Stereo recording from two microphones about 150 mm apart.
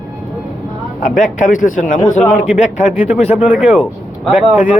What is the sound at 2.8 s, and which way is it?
Speech, 50° left (ahead or behind).